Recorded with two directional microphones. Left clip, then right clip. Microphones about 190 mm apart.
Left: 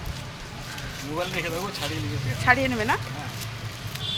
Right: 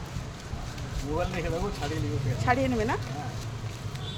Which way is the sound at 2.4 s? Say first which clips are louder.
Left 5 dB; centre (ahead or behind).